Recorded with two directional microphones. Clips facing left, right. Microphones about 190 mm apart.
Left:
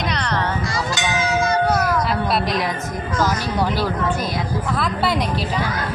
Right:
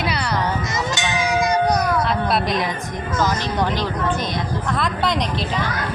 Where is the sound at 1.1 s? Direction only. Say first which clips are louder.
Even; 15° right (ahead or behind).